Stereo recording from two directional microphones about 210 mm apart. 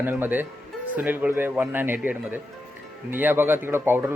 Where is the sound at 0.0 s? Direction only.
10° right (ahead or behind).